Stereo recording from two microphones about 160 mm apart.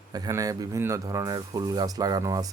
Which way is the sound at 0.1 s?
20° right (ahead or behind).